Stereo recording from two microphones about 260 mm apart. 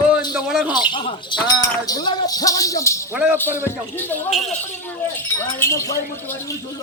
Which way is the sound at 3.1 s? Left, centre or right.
Centre.